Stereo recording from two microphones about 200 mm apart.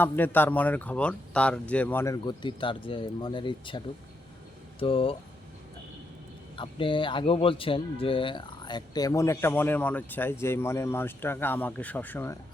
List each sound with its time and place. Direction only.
0.0 s speech: 10° left (ahead or behind)
2.2 s speech: 25° left (ahead or behind)
6.6 s speech: 25° left (ahead or behind)